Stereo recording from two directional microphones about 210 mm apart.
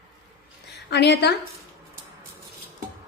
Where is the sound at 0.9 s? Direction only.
55° left (ahead or behind).